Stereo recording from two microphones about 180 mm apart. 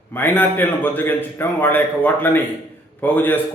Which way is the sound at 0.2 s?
10° left (ahead or behind).